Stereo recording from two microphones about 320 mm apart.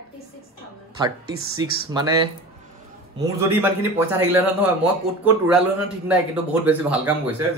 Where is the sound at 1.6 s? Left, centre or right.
Centre.